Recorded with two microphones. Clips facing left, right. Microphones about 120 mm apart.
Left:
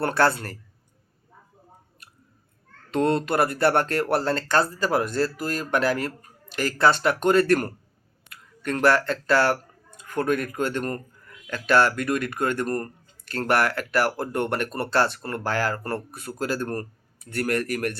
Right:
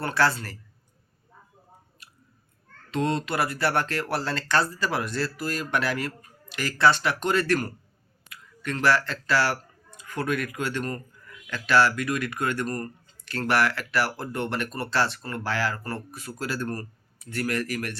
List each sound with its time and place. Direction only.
0.0 s speech: 50° left (ahead or behind)
2.9 s speech: 50° left (ahead or behind)